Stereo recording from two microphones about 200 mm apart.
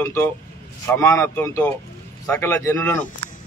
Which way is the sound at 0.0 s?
10° left (ahead or behind).